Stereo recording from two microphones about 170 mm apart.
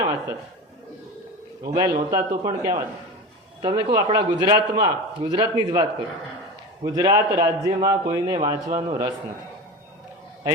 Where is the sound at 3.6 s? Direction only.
25° right (ahead or behind).